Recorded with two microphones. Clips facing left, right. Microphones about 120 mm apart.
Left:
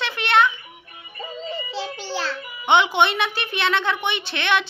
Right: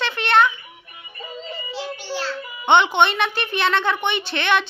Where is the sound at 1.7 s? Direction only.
30° left (ahead or behind).